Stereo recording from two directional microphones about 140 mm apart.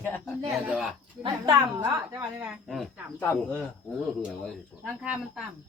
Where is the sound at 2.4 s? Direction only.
5° right (ahead or behind).